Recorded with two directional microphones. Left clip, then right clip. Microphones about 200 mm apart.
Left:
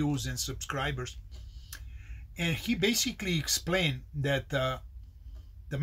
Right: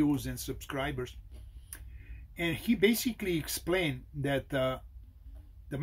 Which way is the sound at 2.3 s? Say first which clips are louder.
Even; 5° right (ahead or behind).